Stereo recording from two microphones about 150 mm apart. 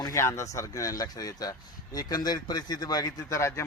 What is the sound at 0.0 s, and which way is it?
Speech, 20° left (ahead or behind).